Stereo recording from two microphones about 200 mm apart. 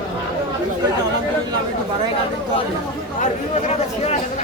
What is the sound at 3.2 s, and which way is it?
Speech, 35° left (ahead or behind).